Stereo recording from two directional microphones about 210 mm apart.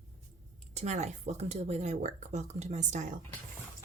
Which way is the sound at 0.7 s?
30° right (ahead or behind).